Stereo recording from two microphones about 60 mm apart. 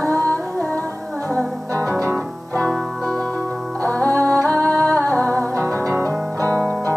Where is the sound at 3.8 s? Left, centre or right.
Left.